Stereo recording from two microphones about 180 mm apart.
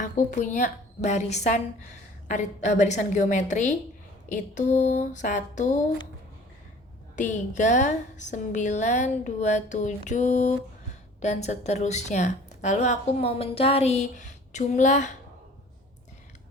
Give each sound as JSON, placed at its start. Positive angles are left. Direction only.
{"t": 0.0, "sound": "a woman's voice", "side_deg": 45}
{"t": 7.2, "sound": "a woman's voice", "side_deg": 45}